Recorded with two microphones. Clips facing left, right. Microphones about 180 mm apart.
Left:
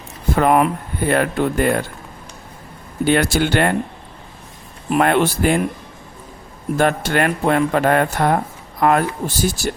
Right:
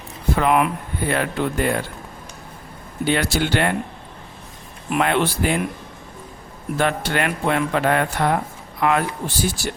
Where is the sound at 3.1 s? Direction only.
50° left (ahead or behind).